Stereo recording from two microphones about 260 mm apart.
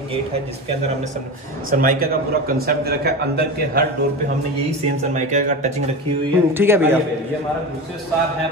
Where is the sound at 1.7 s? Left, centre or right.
Right.